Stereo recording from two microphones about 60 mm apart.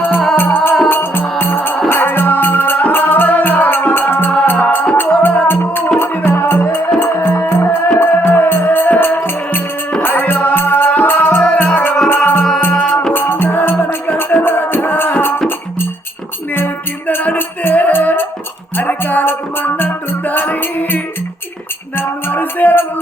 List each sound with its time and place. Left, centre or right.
0.3 s music: left
16.5 s music: left